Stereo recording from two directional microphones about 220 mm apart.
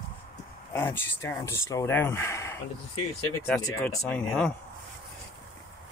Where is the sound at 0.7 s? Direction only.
10° left (ahead or behind).